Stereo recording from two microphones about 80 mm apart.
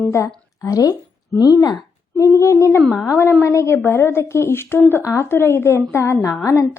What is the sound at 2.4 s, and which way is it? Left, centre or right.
Speech, left.